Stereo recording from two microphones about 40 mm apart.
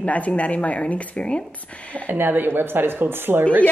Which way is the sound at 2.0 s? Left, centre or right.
Right.